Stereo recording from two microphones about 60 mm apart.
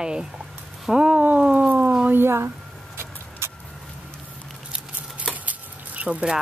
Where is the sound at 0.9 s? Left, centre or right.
Centre.